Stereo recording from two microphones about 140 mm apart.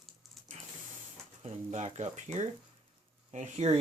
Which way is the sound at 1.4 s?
55° right (ahead or behind).